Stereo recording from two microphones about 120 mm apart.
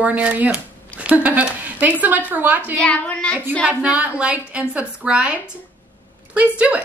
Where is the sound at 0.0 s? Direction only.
10° right (ahead or behind).